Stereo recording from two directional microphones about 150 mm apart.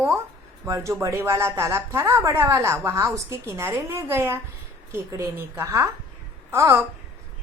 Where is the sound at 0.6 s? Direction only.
20° right (ahead or behind).